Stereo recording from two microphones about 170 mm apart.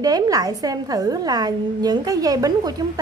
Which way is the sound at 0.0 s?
20° right (ahead or behind).